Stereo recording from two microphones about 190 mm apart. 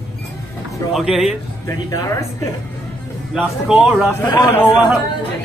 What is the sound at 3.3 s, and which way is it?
Speech, 5° right (ahead or behind).